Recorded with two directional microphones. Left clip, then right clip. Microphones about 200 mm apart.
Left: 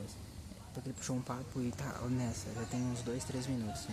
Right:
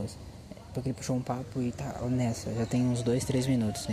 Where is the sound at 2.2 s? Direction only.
20° right (ahead or behind).